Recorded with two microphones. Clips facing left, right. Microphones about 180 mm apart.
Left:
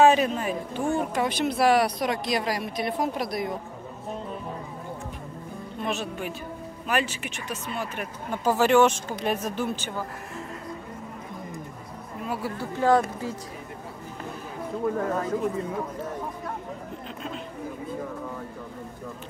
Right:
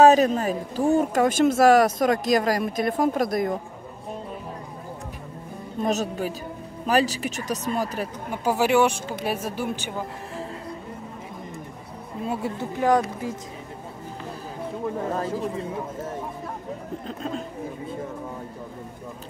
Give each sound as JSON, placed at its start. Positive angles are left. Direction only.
{"t": 0.0, "sound": "speech", "side_deg": -40}
{"t": 5.8, "sound": "speech", "side_deg": -40}
{"t": 8.3, "sound": "a woman's voice", "side_deg": -15}
{"t": 12.2, "sound": "speech", "side_deg": -25}
{"t": 15.1, "sound": "speech", "side_deg": -30}